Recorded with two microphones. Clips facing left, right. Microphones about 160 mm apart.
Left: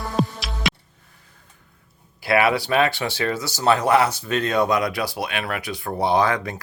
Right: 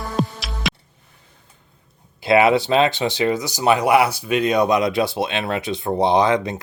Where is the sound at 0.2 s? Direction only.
Centre (ahead or behind).